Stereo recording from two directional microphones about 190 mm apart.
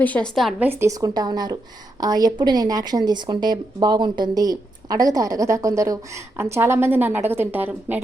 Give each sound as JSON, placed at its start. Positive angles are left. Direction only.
{"t": 0.0, "sound": "a woman's voice", "side_deg": 5}
{"t": 0.7, "sound": "speech", "side_deg": -15}